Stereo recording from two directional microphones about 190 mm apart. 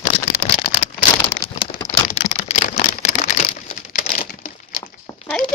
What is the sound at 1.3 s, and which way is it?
Crumpling, 15° left (ahead or behind).